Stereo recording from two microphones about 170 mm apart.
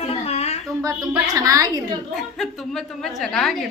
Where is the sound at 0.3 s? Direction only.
40° left (ahead or behind).